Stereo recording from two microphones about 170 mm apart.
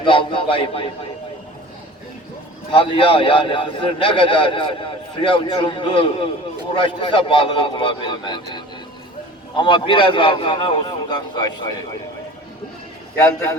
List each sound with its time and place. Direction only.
0.0 s a sound: 30° left (ahead or behind)
2.7 s a man's voice: 30° left (ahead or behind)
13.1 s a man's voice: 20° left (ahead or behind)